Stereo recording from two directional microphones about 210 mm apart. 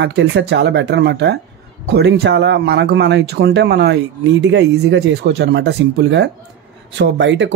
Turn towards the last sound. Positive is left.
turn(degrees=-60)  # may be behind; listen again after turning